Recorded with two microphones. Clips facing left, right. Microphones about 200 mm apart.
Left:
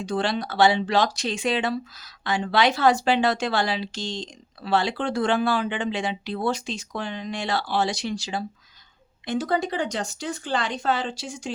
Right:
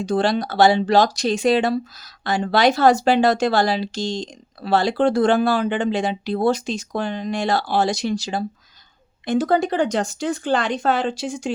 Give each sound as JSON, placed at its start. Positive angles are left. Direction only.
{"t": 0.0, "sound": "speech", "side_deg": -40}